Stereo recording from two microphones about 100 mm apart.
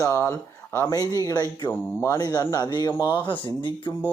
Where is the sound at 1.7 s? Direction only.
25° left (ahead or behind).